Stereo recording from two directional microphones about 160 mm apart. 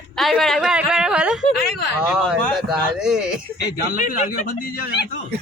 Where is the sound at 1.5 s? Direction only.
75° left (ahead or behind).